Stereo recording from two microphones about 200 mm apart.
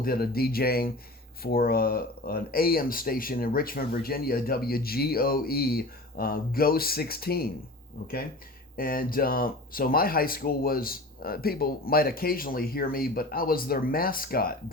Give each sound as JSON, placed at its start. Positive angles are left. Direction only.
{"t": 0.0, "sound": "speech", "side_deg": 50}
{"t": 8.7, "sound": "speech", "side_deg": 45}